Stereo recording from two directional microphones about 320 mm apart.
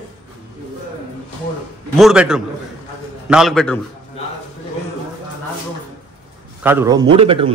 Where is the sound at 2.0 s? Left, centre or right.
Centre.